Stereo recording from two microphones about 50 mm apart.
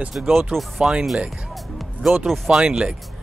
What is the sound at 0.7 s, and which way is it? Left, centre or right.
Speech, right.